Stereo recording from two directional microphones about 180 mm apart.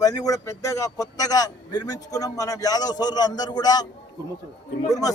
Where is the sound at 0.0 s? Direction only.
20° left (ahead or behind).